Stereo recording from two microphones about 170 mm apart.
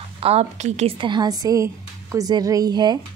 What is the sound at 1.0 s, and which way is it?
A woman's voice, 25° right (ahead or behind).